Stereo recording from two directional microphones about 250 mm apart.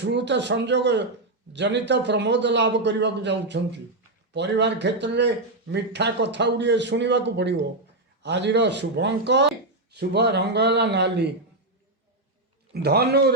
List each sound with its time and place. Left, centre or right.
0.0 s a man's voice: right
12.7 s a man's voice: right